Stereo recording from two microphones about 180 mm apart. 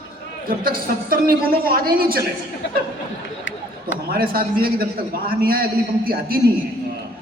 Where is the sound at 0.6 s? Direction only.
55° right (ahead or behind).